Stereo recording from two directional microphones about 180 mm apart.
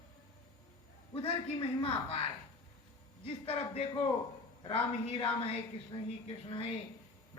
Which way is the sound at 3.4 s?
35° left (ahead or behind).